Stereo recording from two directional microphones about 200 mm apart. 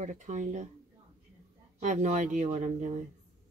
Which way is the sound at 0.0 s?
40° right (ahead or behind).